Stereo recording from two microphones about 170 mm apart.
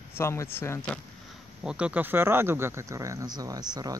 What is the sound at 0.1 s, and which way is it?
Speech, 15° left (ahead or behind).